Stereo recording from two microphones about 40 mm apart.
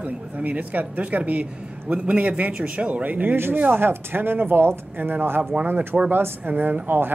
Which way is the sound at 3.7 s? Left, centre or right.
Right.